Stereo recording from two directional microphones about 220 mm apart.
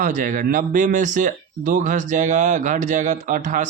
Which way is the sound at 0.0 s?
35° right (ahead or behind).